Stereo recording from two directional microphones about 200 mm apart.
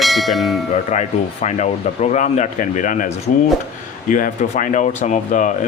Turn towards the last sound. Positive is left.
turn(degrees=40)  # may be behind; listen again after turning